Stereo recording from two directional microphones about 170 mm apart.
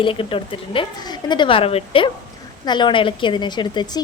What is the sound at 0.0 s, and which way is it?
A woman's voice, 30° left (ahead or behind).